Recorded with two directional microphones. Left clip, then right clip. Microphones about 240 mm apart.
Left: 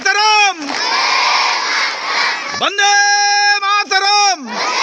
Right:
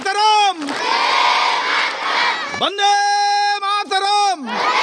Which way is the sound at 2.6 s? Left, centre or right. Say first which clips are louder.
Left 4 dB; centre.